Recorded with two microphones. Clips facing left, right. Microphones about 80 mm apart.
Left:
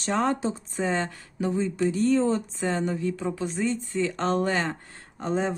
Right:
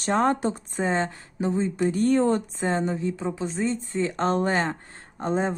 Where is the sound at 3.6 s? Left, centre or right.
Right.